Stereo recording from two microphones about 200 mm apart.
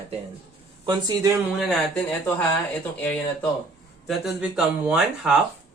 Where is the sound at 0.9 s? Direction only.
20° right (ahead or behind).